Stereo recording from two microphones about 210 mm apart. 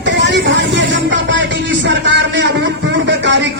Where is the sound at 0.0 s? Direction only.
60° right (ahead or behind).